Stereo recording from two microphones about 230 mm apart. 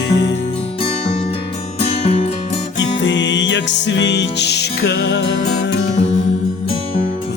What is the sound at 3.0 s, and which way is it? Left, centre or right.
Music, left.